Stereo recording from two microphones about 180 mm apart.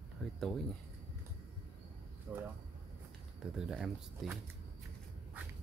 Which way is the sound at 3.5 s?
Centre (ahead or behind).